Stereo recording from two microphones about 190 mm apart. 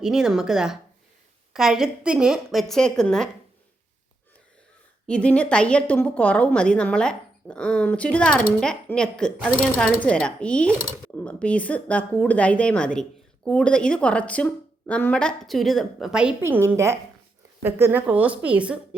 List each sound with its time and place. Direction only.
0.0 s a woman's voice: 5° right (ahead or behind)
5.0 s a woman's voice: 5° left (ahead or behind)